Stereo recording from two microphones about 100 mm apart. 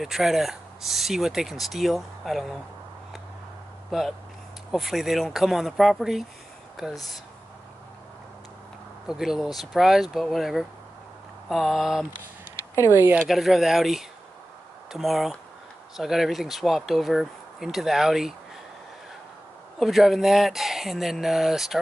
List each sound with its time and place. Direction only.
0.0 s speech: 5° right (ahead or behind)
3.9 s speech: centre (ahead or behind)
9.0 s speech: 5° right (ahead or behind)
12.9 s speech: 20° right (ahead or behind)
13.3 s speech: centre (ahead or behind)
19.8 s speech: centre (ahead or behind)